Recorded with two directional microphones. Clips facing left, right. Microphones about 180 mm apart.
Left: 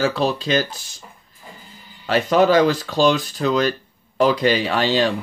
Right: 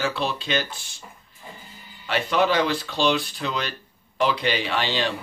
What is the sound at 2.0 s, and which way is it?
Speech, 40° left (ahead or behind).